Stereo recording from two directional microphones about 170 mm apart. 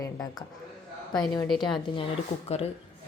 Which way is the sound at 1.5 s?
Centre (ahead or behind).